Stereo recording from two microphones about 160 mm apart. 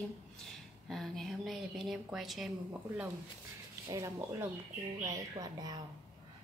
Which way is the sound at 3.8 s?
20° right (ahead or behind).